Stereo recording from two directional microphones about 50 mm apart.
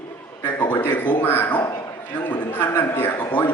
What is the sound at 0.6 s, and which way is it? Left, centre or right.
A man's voice, left.